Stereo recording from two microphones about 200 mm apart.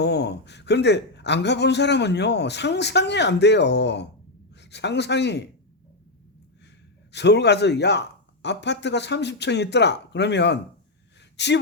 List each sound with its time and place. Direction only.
0.0 s a man's voice: 55° left (ahead or behind)
7.1 s a man's voice: 60° left (ahead or behind)